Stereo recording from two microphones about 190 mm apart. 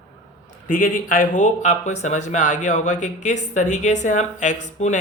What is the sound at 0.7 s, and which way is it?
Speech, 45° left (ahead or behind).